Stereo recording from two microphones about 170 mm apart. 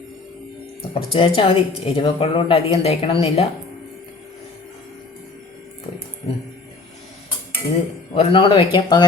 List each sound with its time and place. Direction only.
0.9 s a woman's voice: 35° left (ahead or behind)
8.1 s speech: 35° left (ahead or behind)